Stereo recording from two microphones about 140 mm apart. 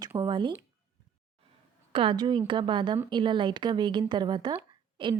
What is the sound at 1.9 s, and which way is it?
Speech, 35° right (ahead or behind).